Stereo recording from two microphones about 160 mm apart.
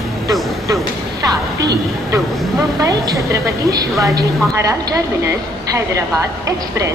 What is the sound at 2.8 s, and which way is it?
A woman's voice, 20° right (ahead or behind).